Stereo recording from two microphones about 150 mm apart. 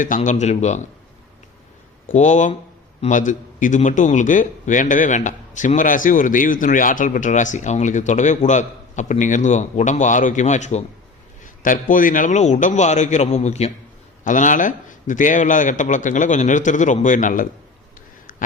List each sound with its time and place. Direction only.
0.2 s a man's voice: 50° left (ahead or behind)
2.1 s a man's voice: 55° left (ahead or behind)
11.4 s a man's voice: 60° left (ahead or behind)
18.3 s a sound: 65° left (ahead or behind)